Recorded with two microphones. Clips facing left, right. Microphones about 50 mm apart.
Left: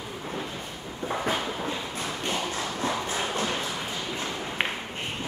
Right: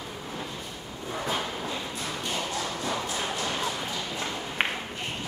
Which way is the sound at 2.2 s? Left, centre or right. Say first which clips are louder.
Left 1 dB; left.